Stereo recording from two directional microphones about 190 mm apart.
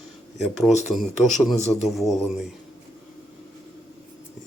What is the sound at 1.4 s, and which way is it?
A man's voice, centre (ahead or behind).